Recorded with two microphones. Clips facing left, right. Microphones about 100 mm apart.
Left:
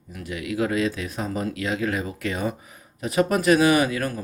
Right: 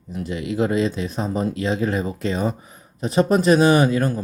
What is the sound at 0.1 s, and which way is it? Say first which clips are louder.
Speech: right 4 dB; 25° right (ahead or behind).